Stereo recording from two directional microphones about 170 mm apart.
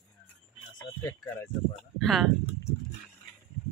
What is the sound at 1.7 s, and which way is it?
Speech, centre (ahead or behind).